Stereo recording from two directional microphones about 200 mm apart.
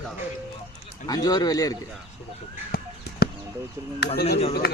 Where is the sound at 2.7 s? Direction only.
50° left (ahead or behind).